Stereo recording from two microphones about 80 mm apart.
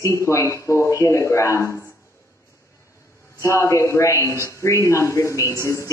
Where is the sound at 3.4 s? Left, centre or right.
Left.